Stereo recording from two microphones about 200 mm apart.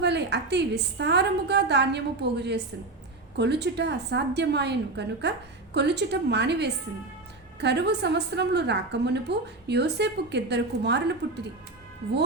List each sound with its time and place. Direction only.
0.0 s a woman's voice: 55° right (ahead or behind)